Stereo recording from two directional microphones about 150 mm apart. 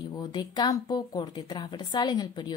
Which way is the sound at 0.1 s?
25° left (ahead or behind).